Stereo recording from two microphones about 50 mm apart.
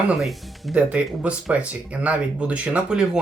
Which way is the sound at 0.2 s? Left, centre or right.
Centre.